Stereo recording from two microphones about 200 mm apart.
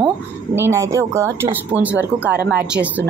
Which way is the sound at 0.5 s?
15° right (ahead or behind).